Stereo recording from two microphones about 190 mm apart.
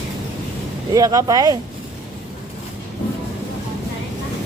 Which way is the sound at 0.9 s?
20° right (ahead or behind).